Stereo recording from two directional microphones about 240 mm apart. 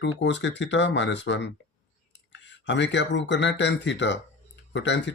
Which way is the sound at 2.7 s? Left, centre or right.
Left.